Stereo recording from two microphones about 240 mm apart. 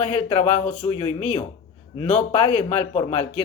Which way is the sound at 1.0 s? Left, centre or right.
Left.